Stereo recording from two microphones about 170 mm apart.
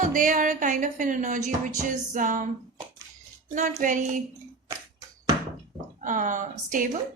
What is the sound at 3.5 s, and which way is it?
Speech, 50° right (ahead or behind).